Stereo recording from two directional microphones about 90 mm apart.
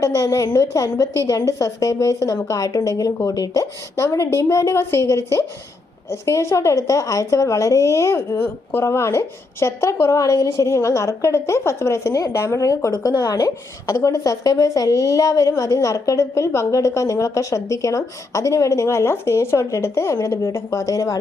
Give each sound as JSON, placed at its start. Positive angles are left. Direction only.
{"t": 0.0, "sound": "a woman's voice", "side_deg": 35}